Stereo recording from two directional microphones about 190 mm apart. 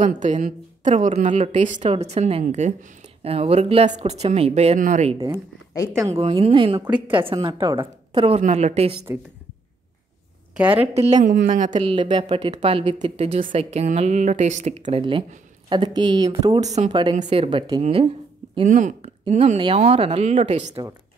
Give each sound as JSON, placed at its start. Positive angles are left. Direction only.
{"t": 0.0, "sound": "a woman's voice", "side_deg": -40}
{"t": 5.1, "sound": "a woman's voice", "side_deg": -20}
{"t": 6.0, "sound": "a woman's voice", "side_deg": -30}
{"t": 8.4, "sound": "a woman's voice", "side_deg": -40}
{"t": 10.9, "sound": "a woman's voice", "side_deg": -35}
{"t": 16.6, "sound": "a woman's voice", "side_deg": -35}
{"t": 16.9, "sound": "a woman's voice", "side_deg": -25}
{"t": 18.0, "sound": "a sound", "side_deg": -25}
{"t": 18.7, "sound": "a woman's voice", "side_deg": -40}